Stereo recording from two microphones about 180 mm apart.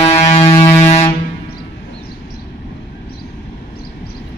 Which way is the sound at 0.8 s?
35° left (ahead or behind).